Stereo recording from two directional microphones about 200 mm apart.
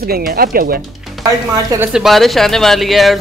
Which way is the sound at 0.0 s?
50° right (ahead or behind).